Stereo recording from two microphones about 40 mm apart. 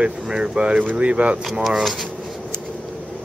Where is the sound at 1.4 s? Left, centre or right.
Centre.